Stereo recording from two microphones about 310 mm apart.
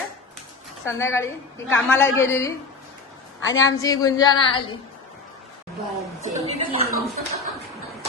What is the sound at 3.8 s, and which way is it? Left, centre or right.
Speech, centre.